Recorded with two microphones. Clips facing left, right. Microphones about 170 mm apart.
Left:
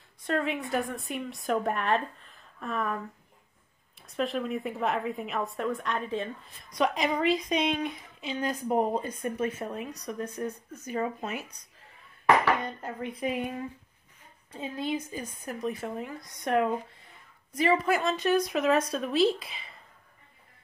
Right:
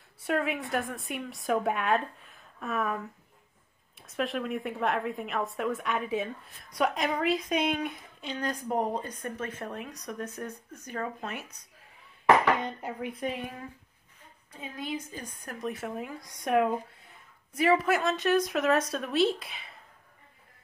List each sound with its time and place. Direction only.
0.2 s a woman's voice: 5° right (ahead or behind)
4.0 s a woman's voice: centre (ahead or behind)
8.2 s a woman's voice: 5° left (ahead or behind)
13.2 s speech: 5° left (ahead or behind)
14.5 s a woman's voice: 30° left (ahead or behind)
15.1 s a woman's voice: centre (ahead or behind)